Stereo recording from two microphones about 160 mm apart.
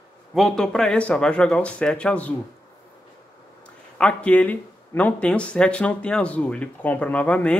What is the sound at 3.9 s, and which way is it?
Speech, 5° left (ahead or behind).